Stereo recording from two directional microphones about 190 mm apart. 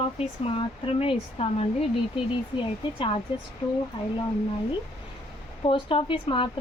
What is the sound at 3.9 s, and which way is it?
Speech, 25° left (ahead or behind).